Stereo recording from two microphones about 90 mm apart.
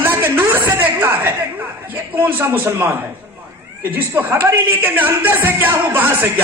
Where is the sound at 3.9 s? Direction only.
20° right (ahead or behind).